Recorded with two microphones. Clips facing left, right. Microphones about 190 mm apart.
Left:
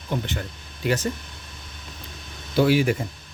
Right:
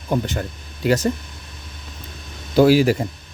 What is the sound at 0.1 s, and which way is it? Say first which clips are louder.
Speech: right 6 dB; 40° right (ahead or behind).